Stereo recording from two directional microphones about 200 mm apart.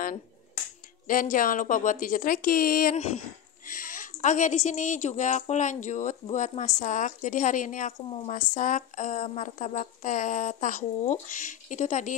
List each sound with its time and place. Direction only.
1.0 s a woman's voice: 45° left (ahead or behind)
4.2 s speech: 40° left (ahead or behind)